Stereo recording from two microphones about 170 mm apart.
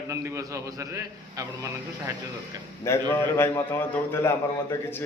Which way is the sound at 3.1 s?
15° left (ahead or behind).